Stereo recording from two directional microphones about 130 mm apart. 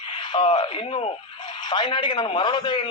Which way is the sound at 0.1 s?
45° left (ahead or behind).